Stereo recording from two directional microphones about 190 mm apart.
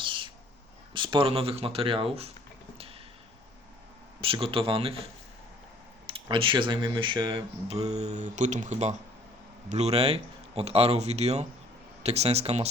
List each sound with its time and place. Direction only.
0.0 s a sound: 25° right (ahead or behind)
0.9 s speech: 25° right (ahead or behind)
4.2 s speech: 30° right (ahead or behind)
6.1 s speech: 30° right (ahead or behind)